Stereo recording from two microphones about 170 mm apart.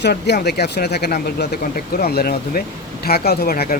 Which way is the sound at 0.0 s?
70° left (ahead or behind).